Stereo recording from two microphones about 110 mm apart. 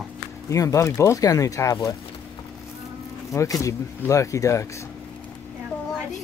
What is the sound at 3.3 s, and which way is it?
Speech, 30° left (ahead or behind).